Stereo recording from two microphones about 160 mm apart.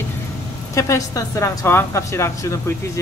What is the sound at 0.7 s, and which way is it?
A woman's voice, 20° left (ahead or behind).